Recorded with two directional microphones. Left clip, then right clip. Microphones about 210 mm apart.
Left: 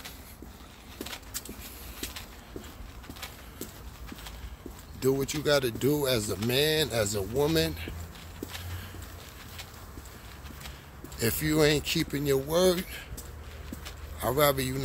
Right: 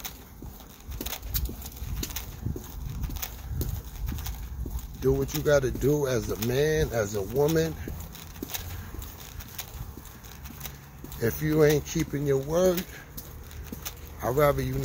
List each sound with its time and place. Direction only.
5.1 s speech: 15° left (ahead or behind)
11.1 s speech: 15° left (ahead or behind)
14.2 s speech: 20° left (ahead or behind)